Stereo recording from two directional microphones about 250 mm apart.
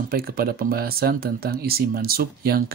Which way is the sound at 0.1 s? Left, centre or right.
Right.